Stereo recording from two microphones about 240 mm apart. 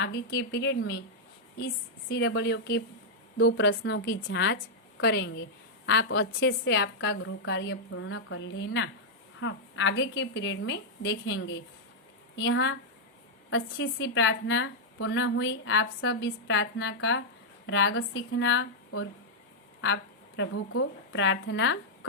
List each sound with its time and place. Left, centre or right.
0.0 s a woman's voice: left